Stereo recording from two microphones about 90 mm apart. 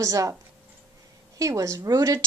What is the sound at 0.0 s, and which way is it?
Speech, 40° right (ahead or behind).